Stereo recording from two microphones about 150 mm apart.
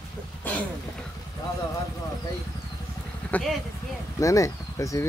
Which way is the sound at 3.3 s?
10° left (ahead or behind).